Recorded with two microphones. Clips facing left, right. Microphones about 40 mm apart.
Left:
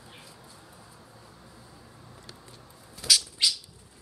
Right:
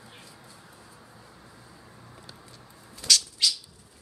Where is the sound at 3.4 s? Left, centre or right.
Left.